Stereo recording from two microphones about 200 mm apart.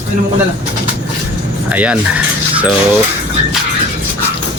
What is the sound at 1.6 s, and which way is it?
Speech, 5° right (ahead or behind).